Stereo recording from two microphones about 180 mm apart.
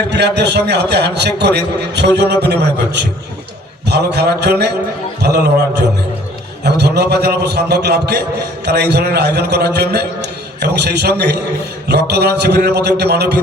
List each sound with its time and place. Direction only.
0.1 s a man's voice: 70° right (ahead or behind)